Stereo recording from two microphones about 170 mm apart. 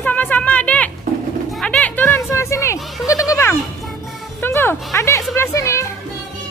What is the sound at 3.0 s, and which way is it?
Goat, 20° left (ahead or behind).